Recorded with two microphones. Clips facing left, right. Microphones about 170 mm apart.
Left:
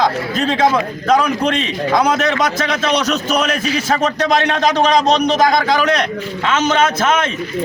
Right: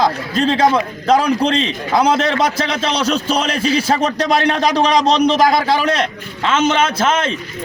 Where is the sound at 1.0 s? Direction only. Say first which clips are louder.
Right 1 dB; 30° right (ahead or behind).